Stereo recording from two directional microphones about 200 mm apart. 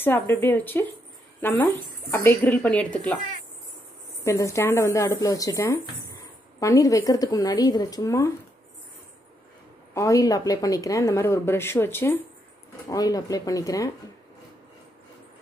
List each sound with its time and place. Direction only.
0.0 s speech: 10° left (ahead or behind)
4.2 s speech: 15° left (ahead or behind)
9.9 s speech: 15° left (ahead or behind)